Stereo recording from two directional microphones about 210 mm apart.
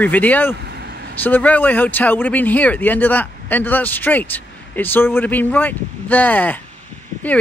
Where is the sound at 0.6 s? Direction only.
50° right (ahead or behind).